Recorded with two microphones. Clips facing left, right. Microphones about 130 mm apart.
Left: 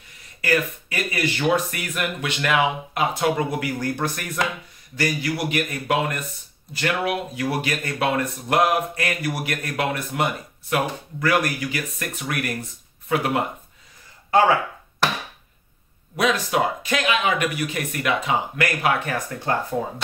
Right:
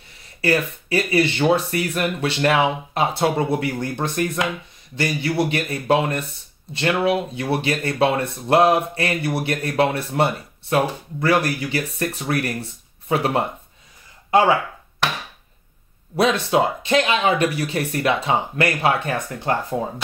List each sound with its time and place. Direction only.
0.4 s speech: 30° right (ahead or behind)
16.2 s speech: 30° right (ahead or behind)